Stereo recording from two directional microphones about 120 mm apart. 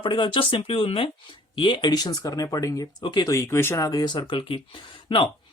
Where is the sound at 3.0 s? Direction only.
40° left (ahead or behind).